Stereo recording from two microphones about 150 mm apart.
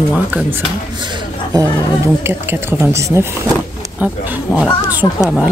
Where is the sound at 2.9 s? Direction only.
20° right (ahead or behind).